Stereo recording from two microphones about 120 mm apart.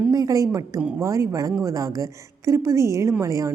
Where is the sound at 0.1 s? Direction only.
30° right (ahead or behind).